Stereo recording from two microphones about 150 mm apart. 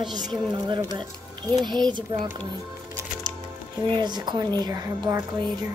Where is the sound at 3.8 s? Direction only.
30° right (ahead or behind).